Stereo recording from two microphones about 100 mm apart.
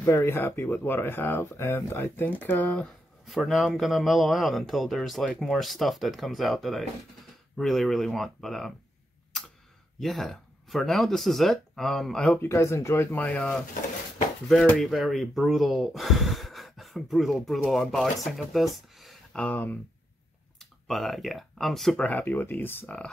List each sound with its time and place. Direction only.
0.0 s speech: 25° left (ahead or behind)
3.3 s speech: centre (ahead or behind)
9.9 s speech: centre (ahead or behind)
12.4 s speech: 25° left (ahead or behind)
14.8 s speech: centre (ahead or behind)
19.3 s speech: 15° left (ahead or behind)
20.5 s speech: 5° left (ahead or behind)
22.0 s speech: 15° left (ahead or behind)